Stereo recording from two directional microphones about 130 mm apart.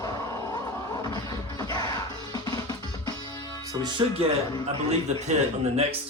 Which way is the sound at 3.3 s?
30° right (ahead or behind).